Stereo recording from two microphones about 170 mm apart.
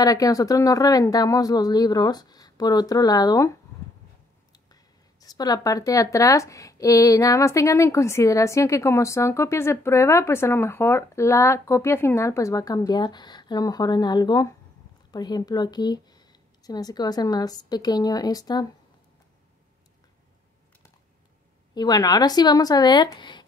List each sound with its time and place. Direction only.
0.0 s speech: 20° left (ahead or behind)
21.7 s speech: 25° left (ahead or behind)